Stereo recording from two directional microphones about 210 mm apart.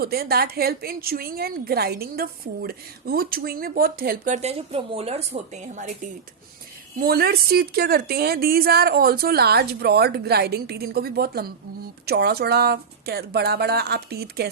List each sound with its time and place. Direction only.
0.0 s a woman's voice: 45° right (ahead or behind)